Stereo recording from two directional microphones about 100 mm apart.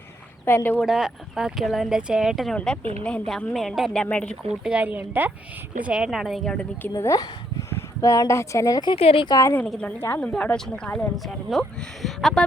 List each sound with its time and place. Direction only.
0.4 s speech: 20° left (ahead or behind)
0.8 s speech: 5° right (ahead or behind)
4.6 s a woman's voice: 15° right (ahead or behind); by 6.7 s 5° left (ahead or behind)
6.9 s speech: 35° left (ahead or behind)
9.0 s speech: 75° left (ahead or behind)
9.2 s speech: 40° left (ahead or behind)
9.6 s speech: 5° left (ahead or behind)